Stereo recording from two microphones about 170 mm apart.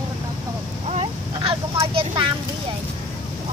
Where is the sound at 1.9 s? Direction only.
30° right (ahead or behind).